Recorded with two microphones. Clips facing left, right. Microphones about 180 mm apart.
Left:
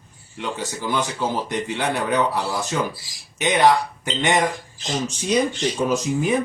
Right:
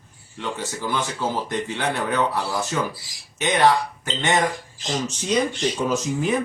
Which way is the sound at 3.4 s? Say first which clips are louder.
Left 1 dB; 15° left (ahead or behind).